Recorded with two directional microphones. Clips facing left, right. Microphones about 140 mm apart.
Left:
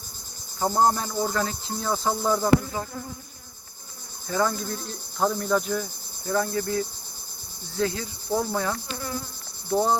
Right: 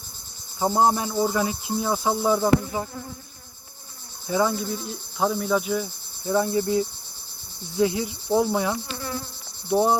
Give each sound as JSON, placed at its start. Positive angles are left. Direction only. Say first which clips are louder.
{"t": 0.6, "sound": "insect", "louder": "right 1 dB", "side_deg": -10}
{"t": 4.3, "sound": "insect", "louder": "right 2 dB", "side_deg": -10}